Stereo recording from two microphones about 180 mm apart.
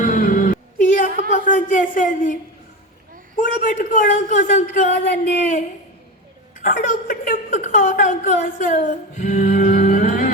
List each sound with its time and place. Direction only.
0.0 s music: 45° left (ahead or behind)
1.5 s a woman's voice: 45° left (ahead or behind)